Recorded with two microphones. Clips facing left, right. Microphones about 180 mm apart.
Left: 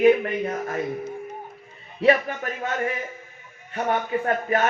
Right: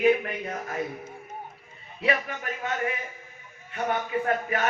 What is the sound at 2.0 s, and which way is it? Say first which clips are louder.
Speech: left 8 dB; 40° left (ahead or behind).